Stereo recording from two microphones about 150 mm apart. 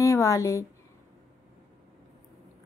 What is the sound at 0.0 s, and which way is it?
Speech, 20° left (ahead or behind).